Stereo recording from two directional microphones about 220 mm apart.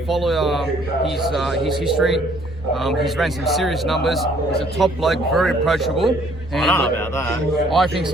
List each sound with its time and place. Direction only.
0.1 s speech: centre (ahead or behind)